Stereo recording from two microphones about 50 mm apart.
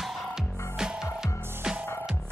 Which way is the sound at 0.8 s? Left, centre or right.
Centre.